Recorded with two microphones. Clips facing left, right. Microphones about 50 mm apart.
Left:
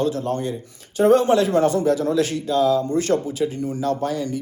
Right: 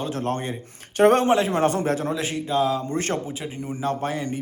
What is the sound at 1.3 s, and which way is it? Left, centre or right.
Speech, right.